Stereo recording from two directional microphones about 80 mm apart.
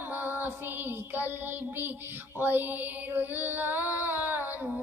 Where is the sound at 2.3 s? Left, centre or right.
Right.